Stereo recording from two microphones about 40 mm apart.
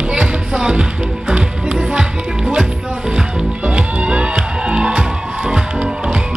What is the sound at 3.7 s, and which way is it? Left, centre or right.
Music, right.